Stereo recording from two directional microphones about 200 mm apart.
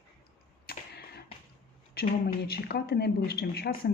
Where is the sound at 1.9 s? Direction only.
50° left (ahead or behind).